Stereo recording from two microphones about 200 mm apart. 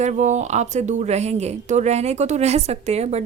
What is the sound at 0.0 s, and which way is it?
A woman's voice, 35° right (ahead or behind).